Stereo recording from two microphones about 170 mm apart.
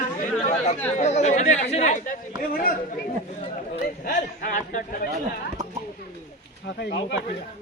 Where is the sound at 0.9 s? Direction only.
45° left (ahead or behind).